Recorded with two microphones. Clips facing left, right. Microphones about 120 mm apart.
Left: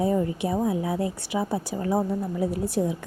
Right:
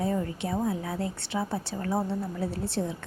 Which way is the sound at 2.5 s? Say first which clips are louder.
Left 5 dB; 25° right (ahead or behind).